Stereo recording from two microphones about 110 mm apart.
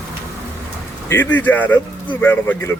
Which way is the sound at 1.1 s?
15° left (ahead or behind).